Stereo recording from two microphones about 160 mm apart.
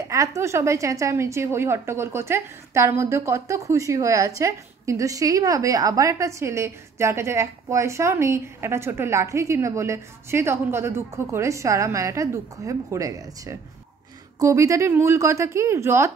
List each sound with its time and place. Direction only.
0.1 s a woman's voice: 20° right (ahead or behind)